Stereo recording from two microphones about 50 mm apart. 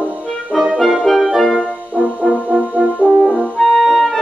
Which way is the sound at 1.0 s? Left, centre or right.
Centre.